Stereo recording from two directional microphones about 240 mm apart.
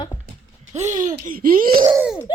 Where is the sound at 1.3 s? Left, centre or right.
Right.